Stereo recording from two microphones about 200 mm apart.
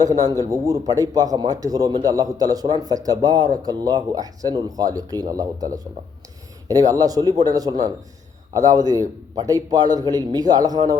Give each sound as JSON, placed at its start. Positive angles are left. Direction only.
{"t": 0.0, "sound": "a man's voice", "side_deg": -20}